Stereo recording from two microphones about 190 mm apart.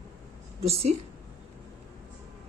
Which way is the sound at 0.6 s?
30° right (ahead or behind).